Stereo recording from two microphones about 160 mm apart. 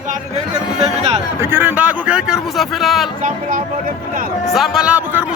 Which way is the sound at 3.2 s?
60° right (ahead or behind).